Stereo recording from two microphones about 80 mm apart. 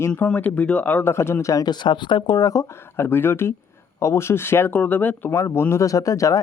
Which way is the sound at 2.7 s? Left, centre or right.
Left.